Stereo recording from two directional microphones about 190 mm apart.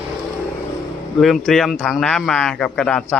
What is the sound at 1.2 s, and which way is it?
A man's voice, centre (ahead or behind).